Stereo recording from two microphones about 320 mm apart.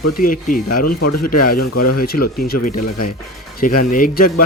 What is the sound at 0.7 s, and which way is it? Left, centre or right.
Speech, left.